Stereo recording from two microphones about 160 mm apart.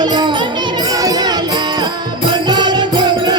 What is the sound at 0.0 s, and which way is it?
Music, 25° right (ahead or behind).